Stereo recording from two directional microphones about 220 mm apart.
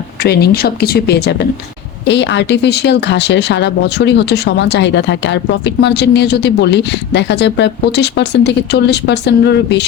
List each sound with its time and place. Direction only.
0.2 s speech: 45° left (ahead or behind)